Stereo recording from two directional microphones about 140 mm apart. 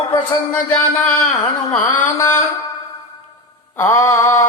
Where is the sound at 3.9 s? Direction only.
20° left (ahead or behind).